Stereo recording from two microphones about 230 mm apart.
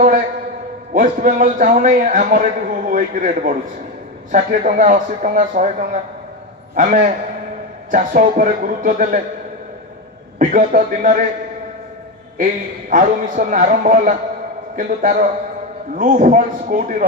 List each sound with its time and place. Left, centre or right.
0.9 s a man's voice: right
10.4 s a man's voice: right
12.9 s a man's voice: right